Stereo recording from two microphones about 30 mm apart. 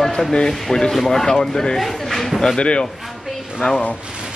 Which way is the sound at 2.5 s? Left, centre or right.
Left.